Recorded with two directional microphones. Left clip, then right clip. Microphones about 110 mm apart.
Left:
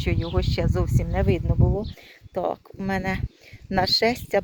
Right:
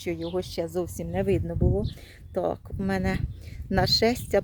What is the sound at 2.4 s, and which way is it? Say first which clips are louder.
Speech: left 2 dB; 45° right (ahead or behind).